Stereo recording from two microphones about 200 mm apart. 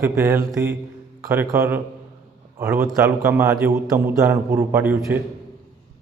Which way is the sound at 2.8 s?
5° right (ahead or behind).